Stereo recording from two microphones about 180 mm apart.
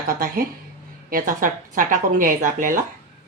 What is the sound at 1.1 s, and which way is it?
Speech, 50° right (ahead or behind).